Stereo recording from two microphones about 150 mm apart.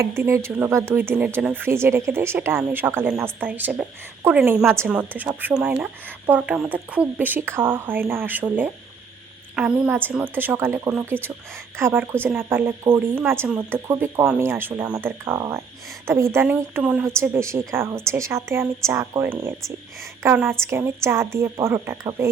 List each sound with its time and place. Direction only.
0.0 s speech: 20° right (ahead or behind)